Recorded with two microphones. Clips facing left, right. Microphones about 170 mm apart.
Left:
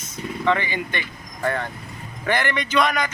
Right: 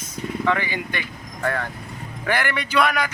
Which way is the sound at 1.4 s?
15° left (ahead or behind).